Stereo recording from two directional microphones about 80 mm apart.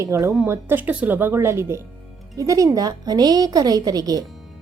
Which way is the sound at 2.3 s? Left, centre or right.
Right.